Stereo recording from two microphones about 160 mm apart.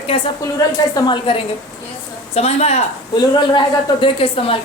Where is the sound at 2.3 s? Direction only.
40° left (ahead or behind).